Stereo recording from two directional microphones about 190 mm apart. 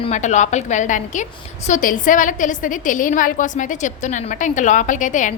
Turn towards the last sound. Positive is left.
turn(degrees=40)  # may be behind; listen again after turning